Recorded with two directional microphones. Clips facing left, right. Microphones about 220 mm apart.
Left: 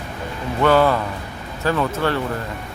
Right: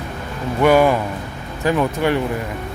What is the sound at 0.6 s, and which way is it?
Speech, 15° right (ahead or behind).